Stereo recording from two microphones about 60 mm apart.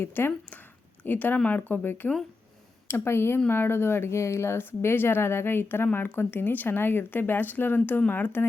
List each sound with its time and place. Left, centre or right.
0.0 s speech: left
2.8 s speech: left